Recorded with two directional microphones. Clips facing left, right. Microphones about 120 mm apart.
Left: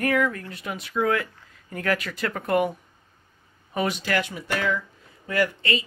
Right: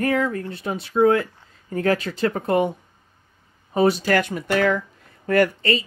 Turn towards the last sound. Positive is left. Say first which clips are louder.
# right 5 dB
turn(degrees=-40)  # may be behind; listen again after turning